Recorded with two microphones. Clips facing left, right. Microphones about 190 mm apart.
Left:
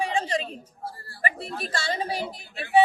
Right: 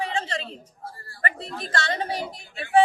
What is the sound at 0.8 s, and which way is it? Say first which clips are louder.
Speech: left 3 dB; 30° left (ahead or behind).